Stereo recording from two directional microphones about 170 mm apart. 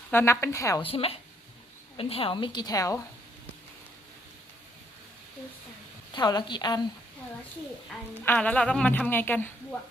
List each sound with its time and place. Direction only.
0.1 s a woman's voice: 15° left (ahead or behind)
0.8 s a woman's voice: 35° left (ahead or behind)
6.1 s a woman's voice: 25° left (ahead or behind)
8.2 s a woman's voice: 10° left (ahead or behind)